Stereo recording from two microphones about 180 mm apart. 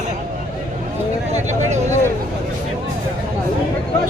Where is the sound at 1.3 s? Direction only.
40° right (ahead or behind).